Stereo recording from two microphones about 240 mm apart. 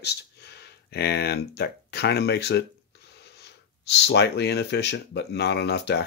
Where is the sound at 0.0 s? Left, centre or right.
Left.